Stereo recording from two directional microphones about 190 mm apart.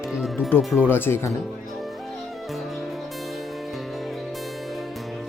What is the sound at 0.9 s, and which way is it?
Speech, 10° left (ahead or behind).